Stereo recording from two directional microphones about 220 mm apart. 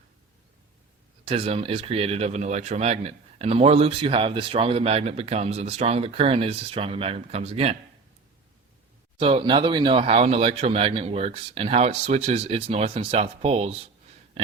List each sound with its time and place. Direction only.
1.2 s speech: 25° right (ahead or behind)
9.2 s speech: 25° right (ahead or behind)